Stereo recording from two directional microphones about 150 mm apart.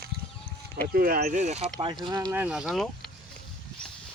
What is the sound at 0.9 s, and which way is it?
Speech, 85° right.